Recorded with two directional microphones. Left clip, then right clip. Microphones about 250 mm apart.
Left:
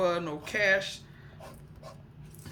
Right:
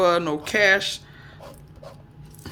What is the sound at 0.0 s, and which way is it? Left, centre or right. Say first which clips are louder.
Speech: right 9 dB; right.